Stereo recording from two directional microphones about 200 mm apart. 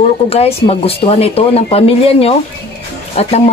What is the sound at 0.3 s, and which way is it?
Speech, 30° left (ahead or behind).